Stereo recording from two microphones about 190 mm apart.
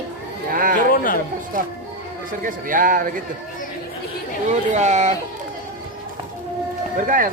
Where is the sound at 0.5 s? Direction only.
45° right (ahead or behind).